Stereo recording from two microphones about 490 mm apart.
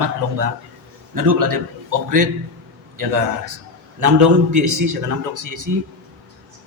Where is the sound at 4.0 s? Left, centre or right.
Right.